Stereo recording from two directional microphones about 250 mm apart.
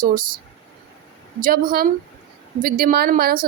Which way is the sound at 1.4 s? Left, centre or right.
Right.